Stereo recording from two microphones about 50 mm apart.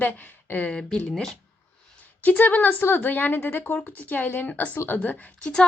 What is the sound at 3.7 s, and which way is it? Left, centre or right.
A woman's voice, left.